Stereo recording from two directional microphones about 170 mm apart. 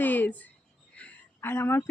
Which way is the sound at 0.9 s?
10° left (ahead or behind).